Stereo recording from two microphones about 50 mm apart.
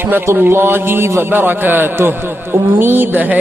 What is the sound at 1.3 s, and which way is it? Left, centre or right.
Speech, right.